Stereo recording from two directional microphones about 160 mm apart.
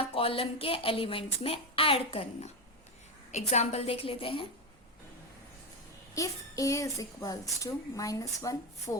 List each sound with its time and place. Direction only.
0.0 s a woman's voice: 35° left (ahead or behind)
6.1 s speech: 20° left (ahead or behind)